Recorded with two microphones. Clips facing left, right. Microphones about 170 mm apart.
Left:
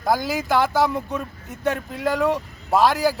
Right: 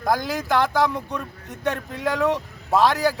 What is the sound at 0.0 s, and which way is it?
Speech, 5° left (ahead or behind).